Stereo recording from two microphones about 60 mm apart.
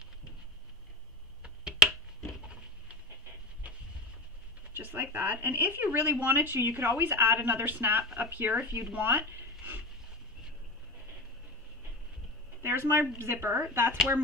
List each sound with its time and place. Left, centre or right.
1.4 s a sound: centre
4.7 s speech: right
12.6 s a woman's voice: right